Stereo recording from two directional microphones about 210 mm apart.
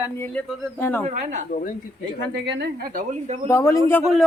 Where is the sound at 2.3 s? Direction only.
55° right (ahead or behind); by 3.4 s 35° right (ahead or behind).